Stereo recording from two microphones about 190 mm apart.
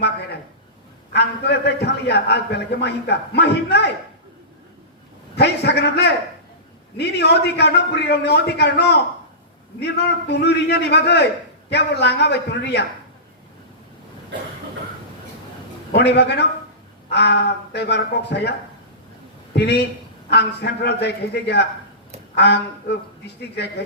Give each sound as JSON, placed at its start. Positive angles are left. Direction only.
{"t": 1.1, "sound": "a man's voice", "side_deg": 60}
{"t": 5.4, "sound": "a man's voice", "side_deg": 60}
{"t": 15.9, "sound": "a man's voice", "side_deg": 60}
{"t": 19.5, "sound": "a man's voice", "side_deg": 60}